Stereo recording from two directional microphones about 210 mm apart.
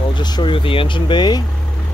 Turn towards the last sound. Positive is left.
turn(degrees=20)  # may be behind; listen again after turning